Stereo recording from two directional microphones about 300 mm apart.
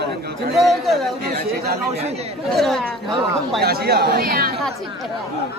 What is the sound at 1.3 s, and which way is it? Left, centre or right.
Speech, right.